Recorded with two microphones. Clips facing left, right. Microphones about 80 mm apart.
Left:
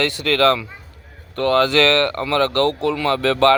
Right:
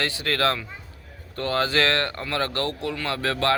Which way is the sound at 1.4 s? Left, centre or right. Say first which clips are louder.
Left 7 dB; left.